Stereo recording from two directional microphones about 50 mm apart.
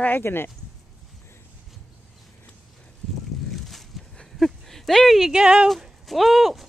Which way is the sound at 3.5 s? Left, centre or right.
Centre.